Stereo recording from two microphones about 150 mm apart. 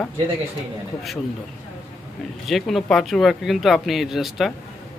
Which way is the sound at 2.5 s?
Centre (ahead or behind).